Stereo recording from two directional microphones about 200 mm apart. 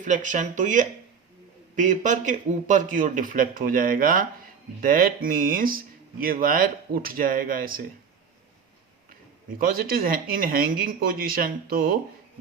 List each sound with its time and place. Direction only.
0.0 s speech: 40° right (ahead or behind)
9.6 s speech: 45° right (ahead or behind)